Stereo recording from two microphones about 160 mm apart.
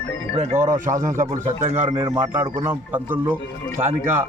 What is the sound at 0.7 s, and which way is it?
Speech, 50° right (ahead or behind).